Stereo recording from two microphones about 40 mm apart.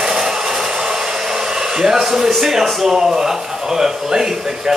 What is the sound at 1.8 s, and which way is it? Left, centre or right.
Speech, centre.